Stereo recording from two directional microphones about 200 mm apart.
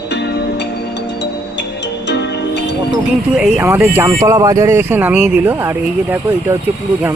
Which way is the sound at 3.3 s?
5° right (ahead or behind).